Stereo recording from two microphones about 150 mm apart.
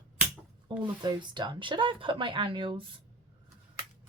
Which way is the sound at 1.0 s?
30° right (ahead or behind).